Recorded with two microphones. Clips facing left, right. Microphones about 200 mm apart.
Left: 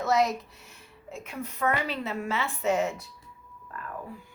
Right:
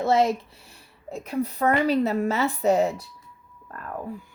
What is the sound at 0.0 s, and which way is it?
A woman's voice, 30° right (ahead or behind).